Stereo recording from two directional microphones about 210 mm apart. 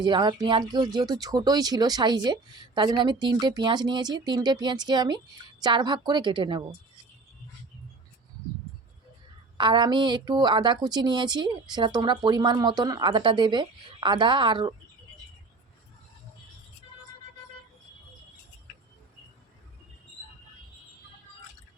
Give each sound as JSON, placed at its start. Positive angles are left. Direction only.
{"t": 0.0, "sound": "a woman's voice", "side_deg": -20}
{"t": 9.6, "sound": "a woman's voice", "side_deg": -20}